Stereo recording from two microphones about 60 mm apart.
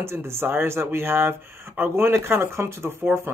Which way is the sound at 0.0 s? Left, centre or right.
Right.